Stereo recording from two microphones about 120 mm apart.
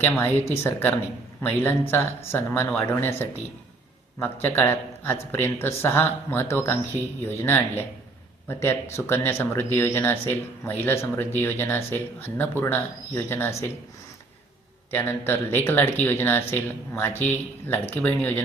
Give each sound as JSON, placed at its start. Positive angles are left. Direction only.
{"t": 0.2, "sound": "speech", "side_deg": 20}
{"t": 14.8, "sound": "speech", "side_deg": 20}